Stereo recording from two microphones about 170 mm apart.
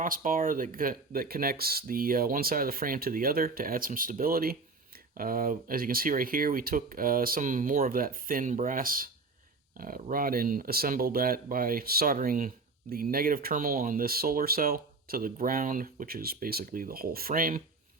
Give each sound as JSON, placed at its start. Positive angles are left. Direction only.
{"t": 0.0, "sound": "speech", "side_deg": -50}